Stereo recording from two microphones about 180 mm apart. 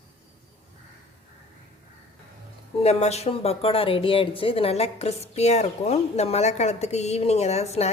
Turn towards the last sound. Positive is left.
turn(degrees=35)  # may be behind; listen again after turning